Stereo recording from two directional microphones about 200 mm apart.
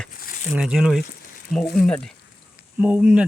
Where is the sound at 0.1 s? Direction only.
45° left (ahead or behind).